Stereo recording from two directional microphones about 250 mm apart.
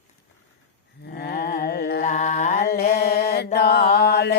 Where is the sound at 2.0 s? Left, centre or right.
Left.